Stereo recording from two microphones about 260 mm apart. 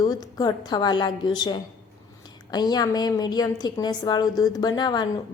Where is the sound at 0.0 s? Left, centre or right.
Centre.